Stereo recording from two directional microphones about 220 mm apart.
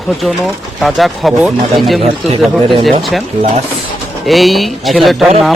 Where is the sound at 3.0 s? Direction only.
Centre (ahead or behind).